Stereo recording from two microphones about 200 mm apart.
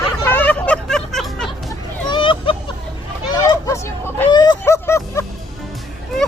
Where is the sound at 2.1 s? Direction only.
25° left (ahead or behind).